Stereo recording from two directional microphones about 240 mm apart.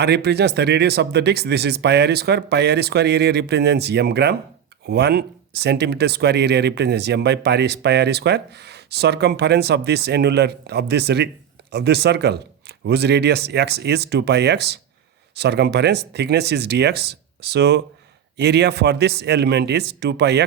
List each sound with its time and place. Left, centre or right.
0.0 s speech: right